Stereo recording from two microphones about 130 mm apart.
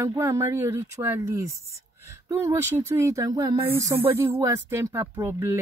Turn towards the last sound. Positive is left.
turn(degrees=-25)  # may be behind; listen again after turning